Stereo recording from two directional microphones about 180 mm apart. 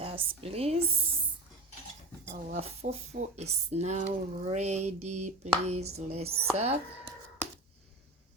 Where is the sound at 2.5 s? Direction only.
35° right (ahead or behind).